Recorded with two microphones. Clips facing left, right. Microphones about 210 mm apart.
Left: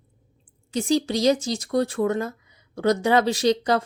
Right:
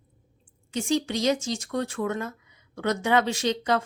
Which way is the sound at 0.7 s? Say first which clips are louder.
Left 4 dB; 35° left (ahead or behind).